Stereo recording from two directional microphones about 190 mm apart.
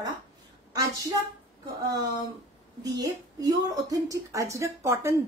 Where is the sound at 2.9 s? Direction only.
20° right (ahead or behind).